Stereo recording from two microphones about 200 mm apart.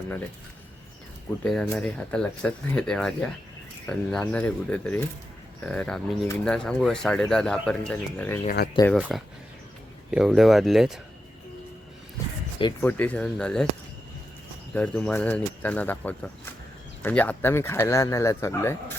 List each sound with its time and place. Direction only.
1.5 s speech: 5° left (ahead or behind)
8.4 s speech: 45° left (ahead or behind)
9.0 s speech: 5° right (ahead or behind)
12.8 s speech: 10° left (ahead or behind)
14.7 s speech: 5° left (ahead or behind)